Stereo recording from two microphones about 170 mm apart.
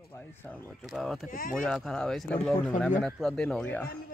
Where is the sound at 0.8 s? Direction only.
Centre (ahead or behind).